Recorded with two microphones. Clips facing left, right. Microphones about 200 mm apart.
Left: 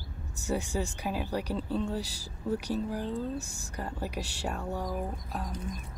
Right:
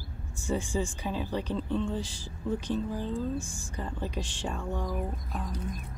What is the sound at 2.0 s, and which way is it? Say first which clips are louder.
Speech: even; 40° left (ahead or behind).